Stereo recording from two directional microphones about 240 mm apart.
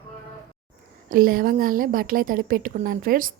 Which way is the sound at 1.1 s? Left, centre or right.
Right.